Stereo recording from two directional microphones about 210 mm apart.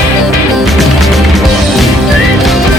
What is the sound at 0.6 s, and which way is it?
Music, centre (ahead or behind).